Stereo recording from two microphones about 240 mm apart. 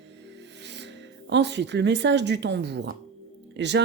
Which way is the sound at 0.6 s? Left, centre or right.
Right.